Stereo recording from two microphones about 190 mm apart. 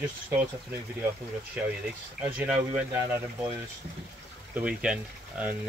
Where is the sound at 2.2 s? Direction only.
5° right (ahead or behind).